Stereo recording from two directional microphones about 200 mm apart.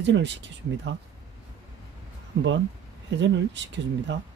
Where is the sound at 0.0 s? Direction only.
60° right (ahead or behind).